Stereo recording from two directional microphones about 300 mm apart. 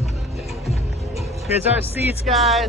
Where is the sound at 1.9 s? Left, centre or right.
Centre.